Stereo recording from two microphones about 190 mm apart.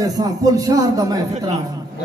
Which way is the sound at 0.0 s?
20° right (ahead or behind).